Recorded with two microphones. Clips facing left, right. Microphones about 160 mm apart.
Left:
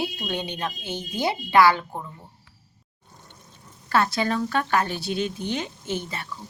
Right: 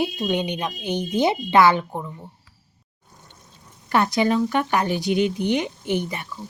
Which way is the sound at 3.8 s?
20° right (ahead or behind).